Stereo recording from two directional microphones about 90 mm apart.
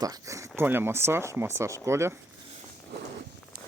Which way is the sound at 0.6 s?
25° right (ahead or behind).